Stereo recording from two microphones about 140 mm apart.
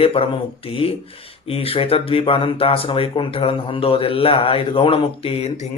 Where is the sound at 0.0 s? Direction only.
45° left (ahead or behind).